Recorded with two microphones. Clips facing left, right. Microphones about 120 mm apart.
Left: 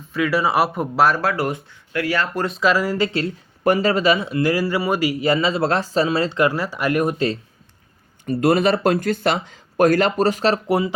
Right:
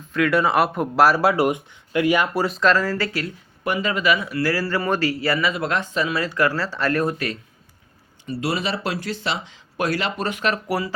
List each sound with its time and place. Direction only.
0.1 s speech: centre (ahead or behind); by 3.3 s 25° left (ahead or behind)
3.6 s speech: 40° left (ahead or behind); by 7.3 s 25° left (ahead or behind)
8.3 s speech: 50° left (ahead or behind); by 10.9 s 20° left (ahead or behind)